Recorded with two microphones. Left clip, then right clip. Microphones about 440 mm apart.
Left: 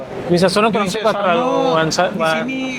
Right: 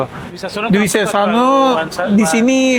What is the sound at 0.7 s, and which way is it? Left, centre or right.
Speech, right.